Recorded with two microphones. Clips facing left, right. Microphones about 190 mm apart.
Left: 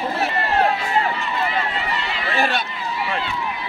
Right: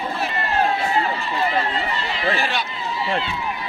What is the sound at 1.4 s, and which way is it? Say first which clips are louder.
Run: right 4 dB; 35° right (ahead or behind).